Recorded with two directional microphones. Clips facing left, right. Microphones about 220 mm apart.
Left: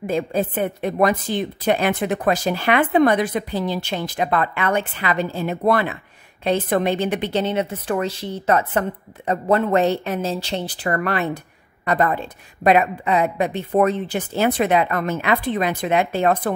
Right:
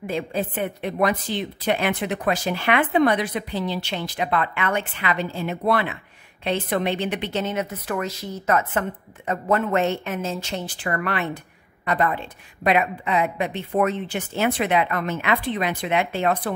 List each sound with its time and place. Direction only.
0.0 s a woman's voice: 45° left (ahead or behind)